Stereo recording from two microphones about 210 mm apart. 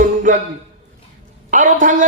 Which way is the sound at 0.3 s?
40° right (ahead or behind).